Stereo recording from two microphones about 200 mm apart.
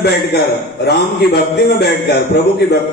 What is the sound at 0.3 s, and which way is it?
A man's voice, 55° left (ahead or behind).